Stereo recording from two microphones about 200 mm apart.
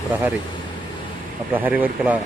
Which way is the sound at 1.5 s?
10° right (ahead or behind).